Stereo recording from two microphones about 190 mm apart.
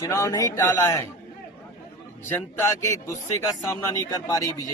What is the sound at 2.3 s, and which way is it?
A man's voice, 15° left (ahead or behind).